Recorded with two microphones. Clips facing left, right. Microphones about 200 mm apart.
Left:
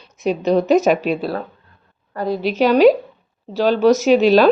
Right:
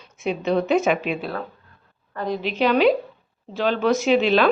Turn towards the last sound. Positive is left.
turn(degrees=40)  # may be behind; listen again after turning